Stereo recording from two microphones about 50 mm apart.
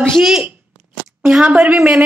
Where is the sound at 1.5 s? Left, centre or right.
Right.